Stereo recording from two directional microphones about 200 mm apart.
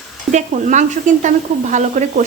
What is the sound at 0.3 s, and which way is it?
Speech, 40° right (ahead or behind).